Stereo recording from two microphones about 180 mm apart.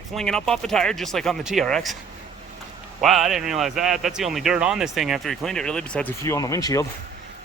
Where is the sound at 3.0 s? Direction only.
Centre (ahead or behind).